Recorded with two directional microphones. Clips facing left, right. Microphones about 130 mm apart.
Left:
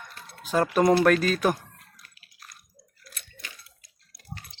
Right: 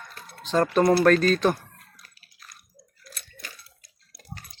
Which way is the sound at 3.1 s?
40° right (ahead or behind).